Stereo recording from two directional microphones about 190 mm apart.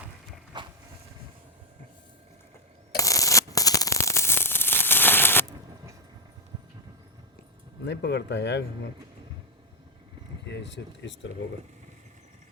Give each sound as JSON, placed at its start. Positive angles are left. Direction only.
{"t": 0.5, "sound": "walk", "side_deg": -25}
{"t": 2.9, "sound": "a sound", "side_deg": 15}
{"t": 7.9, "sound": "speech", "side_deg": 65}
{"t": 10.4, "sound": "speech", "side_deg": 65}